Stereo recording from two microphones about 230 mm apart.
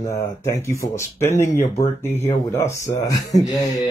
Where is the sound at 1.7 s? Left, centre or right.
Left.